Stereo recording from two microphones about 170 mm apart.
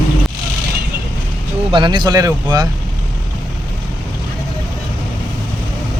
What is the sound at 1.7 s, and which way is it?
Speech, 25° right (ahead or behind).